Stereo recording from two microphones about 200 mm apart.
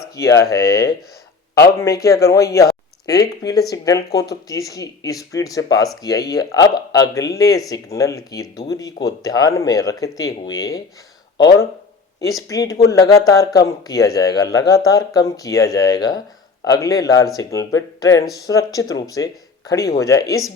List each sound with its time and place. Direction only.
0.2 s speech: 15° left (ahead or behind)
12.2 s speech: 15° left (ahead or behind)